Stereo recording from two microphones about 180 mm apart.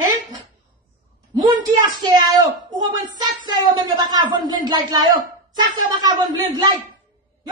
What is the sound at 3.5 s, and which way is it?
Speech, 25° right (ahead or behind).